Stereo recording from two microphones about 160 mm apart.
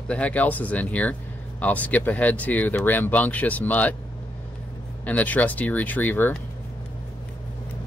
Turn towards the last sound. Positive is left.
turn(degrees=10)  # may be behind; listen again after turning